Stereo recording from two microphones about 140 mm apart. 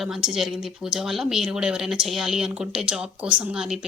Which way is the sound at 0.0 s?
5° right (ahead or behind).